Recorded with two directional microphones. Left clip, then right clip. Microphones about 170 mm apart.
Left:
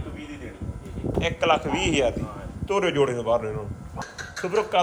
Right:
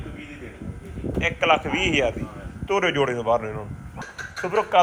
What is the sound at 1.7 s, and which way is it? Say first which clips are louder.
Speech: right 2 dB; 70° left (ahead or behind).